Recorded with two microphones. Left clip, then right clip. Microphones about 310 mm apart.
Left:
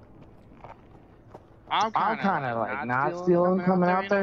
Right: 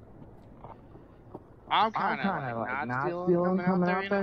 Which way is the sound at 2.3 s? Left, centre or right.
Left.